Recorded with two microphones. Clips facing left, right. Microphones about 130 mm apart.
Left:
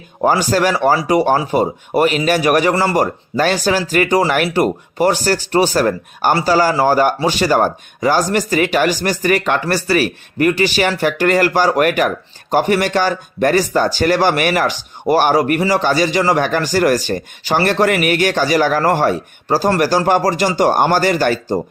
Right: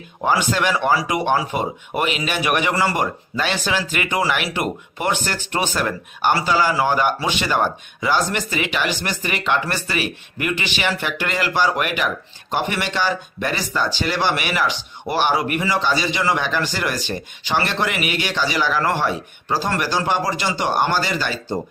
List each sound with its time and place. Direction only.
0.2 s speech: 40° left (ahead or behind)